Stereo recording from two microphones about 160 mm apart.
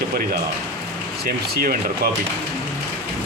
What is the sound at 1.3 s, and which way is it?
Speech, 70° right (ahead or behind).